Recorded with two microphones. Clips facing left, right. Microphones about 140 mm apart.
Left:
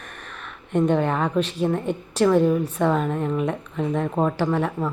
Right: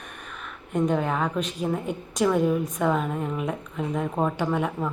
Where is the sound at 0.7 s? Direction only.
5° right (ahead or behind).